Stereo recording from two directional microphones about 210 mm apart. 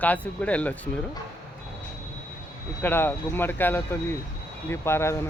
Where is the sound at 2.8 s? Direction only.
10° left (ahead or behind).